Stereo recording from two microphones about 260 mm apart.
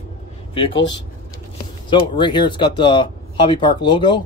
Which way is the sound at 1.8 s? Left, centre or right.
Centre.